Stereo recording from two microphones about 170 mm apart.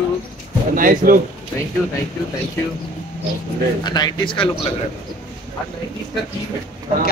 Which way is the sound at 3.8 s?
25° left (ahead or behind).